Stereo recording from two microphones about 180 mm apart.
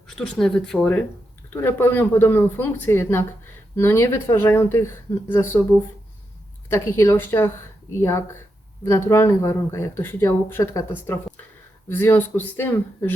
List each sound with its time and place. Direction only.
0.2 s speech: 5° left (ahead or behind)
6.7 s speech: 15° left (ahead or behind)
8.8 s speech: 15° left (ahead or behind)